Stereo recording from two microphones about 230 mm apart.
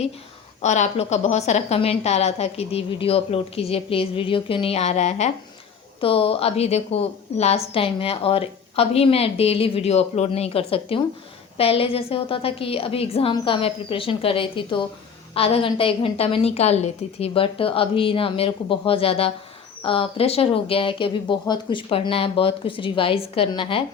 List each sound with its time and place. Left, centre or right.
0.6 s a woman's voice: left